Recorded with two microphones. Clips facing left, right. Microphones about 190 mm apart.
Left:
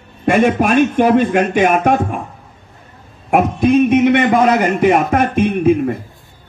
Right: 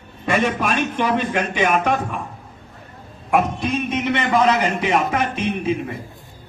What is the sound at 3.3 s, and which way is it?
A man's voice, 50° left (ahead or behind).